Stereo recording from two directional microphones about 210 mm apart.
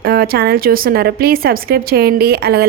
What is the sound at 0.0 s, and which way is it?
A woman's voice, 45° right (ahead or behind).